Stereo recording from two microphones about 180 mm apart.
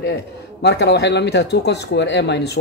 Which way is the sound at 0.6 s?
70° left (ahead or behind).